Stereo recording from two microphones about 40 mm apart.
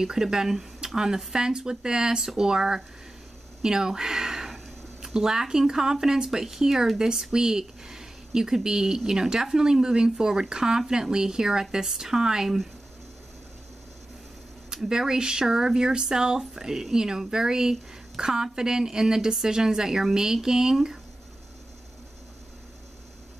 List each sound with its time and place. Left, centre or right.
0.0 s speech: centre
14.9 s speech: centre